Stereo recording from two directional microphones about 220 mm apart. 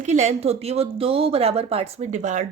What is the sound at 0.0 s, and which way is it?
Speech, 30° right (ahead or behind).